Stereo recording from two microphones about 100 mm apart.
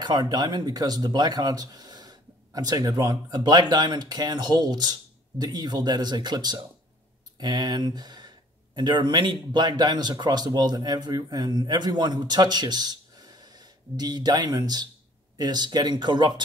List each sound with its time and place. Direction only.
0.0 s speech: 45° right (ahead or behind)